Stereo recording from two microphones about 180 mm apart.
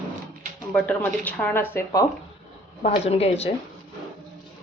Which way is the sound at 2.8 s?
35° left (ahead or behind).